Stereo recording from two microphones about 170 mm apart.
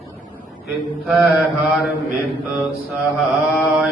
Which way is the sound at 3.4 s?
Centre (ahead or behind).